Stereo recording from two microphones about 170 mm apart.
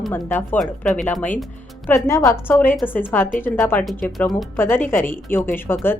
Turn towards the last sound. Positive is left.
turn(degrees=15)  # may be behind; listen again after turning